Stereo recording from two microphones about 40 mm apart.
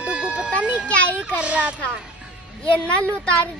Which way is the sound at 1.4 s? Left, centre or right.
Right.